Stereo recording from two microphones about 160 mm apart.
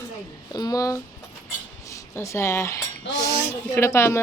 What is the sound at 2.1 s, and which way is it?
Speech, 15° left (ahead or behind).